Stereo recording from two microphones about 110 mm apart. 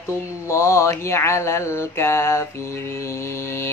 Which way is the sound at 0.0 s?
25° left (ahead or behind).